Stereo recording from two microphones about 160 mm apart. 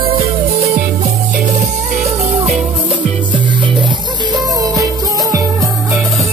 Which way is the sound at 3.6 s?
30° right (ahead or behind).